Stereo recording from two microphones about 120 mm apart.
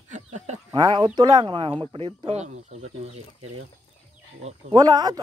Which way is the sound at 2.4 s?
75° right (ahead or behind).